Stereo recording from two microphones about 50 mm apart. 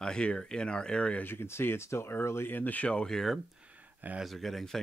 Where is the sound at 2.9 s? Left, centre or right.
Centre.